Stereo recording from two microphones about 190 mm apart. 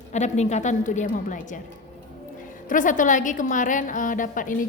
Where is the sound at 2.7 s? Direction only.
45° left (ahead or behind).